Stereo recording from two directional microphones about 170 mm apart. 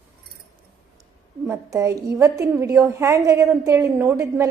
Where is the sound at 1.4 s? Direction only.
20° right (ahead or behind).